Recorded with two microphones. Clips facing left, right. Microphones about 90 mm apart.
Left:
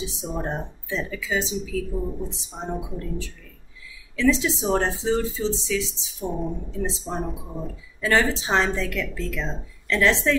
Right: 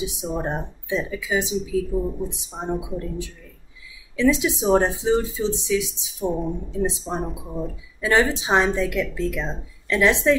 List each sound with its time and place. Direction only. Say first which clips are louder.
0.0 s a woman's voice: right 3 dB; 15° right (ahead or behind)